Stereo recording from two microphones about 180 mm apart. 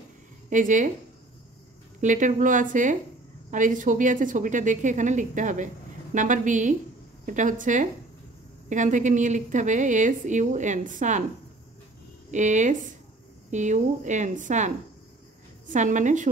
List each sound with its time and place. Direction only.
0.5 s a woman's voice: 45° right (ahead or behind)
2.0 s a woman's voice: 45° right (ahead or behind)
12.3 s a woman's voice: 40° right (ahead or behind)